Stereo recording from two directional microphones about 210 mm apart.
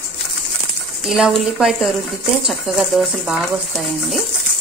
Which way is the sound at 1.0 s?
Centre (ahead or behind).